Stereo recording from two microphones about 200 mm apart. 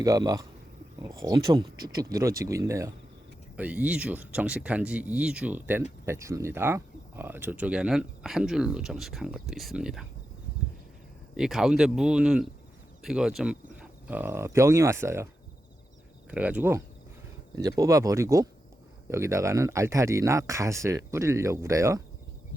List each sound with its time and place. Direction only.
0.0 s speech: 15° right (ahead or behind)
11.3 s speech: centre (ahead or behind)
16.3 s speech: 5° right (ahead or behind)